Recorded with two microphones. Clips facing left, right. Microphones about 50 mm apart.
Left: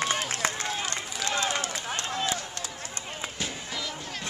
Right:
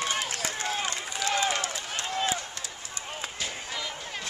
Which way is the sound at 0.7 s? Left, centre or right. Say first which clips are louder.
Right 1 dB; centre.